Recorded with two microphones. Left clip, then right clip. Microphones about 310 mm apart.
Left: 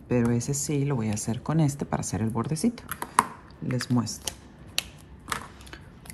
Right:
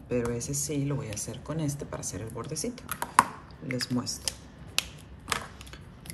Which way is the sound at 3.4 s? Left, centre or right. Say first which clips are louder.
Left 1 dB; left.